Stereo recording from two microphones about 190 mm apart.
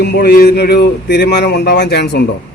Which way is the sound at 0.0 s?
55° left (ahead or behind).